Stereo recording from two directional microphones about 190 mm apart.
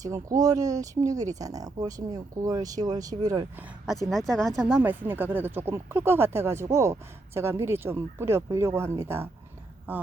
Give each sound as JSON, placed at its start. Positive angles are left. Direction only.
{"t": 0.0, "sound": "speech", "side_deg": -15}
{"t": 4.1, "sound": "speech", "side_deg": 0}
{"t": 4.8, "sound": "speech", "side_deg": -10}